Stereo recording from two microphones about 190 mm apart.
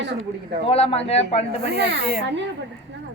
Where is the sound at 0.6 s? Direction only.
30° left (ahead or behind).